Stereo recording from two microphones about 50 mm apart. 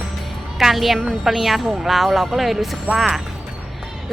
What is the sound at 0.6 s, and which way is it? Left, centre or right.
A woman's voice, centre.